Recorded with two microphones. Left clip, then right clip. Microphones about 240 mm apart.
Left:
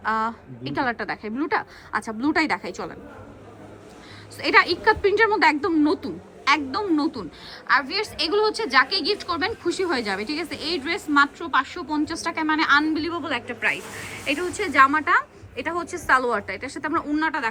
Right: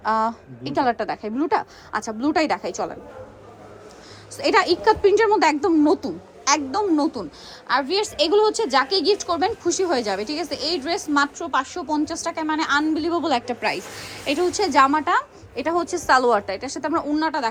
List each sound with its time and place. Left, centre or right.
0.0 s speech: centre
4.4 s a woman's voice: centre